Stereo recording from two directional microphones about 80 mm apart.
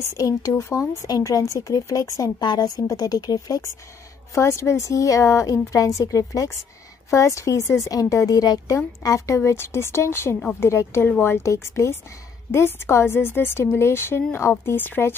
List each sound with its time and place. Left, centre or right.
0.2 s speech: left
2.4 s speech: left
4.4 s a woman's voice: left